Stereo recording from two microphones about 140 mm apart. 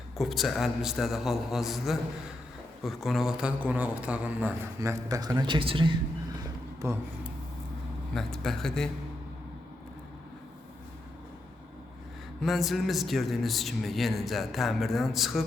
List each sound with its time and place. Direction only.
0.2 s a man's voice: centre (ahead or behind)
4.8 s speech: 20° right (ahead or behind)
5.4 s speech: 35° right (ahead or behind)
6.8 s speech: 20° right (ahead or behind)
8.1 s speech: 5° left (ahead or behind)
12.4 s speech: centre (ahead or behind)